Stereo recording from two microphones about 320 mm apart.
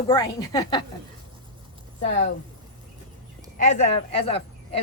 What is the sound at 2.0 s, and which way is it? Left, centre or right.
Speech, left.